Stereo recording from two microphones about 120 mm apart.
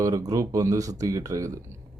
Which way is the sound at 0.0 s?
30° right (ahead or behind).